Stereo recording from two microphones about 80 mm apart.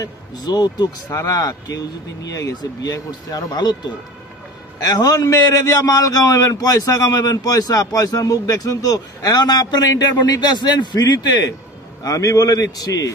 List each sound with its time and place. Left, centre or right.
0.0 s speech: left
1.1 s a man's voice: left
12.0 s a man's voice: left